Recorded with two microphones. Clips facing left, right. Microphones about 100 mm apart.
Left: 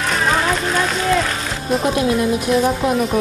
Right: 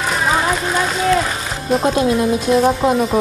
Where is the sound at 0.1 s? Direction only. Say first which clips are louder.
Right 1 dB; 5° right (ahead or behind).